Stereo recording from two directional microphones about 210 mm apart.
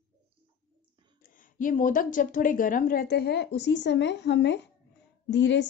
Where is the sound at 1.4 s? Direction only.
40° left (ahead or behind).